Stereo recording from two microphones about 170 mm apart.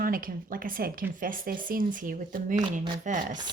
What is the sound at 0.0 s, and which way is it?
A woman's voice, 55° right (ahead or behind).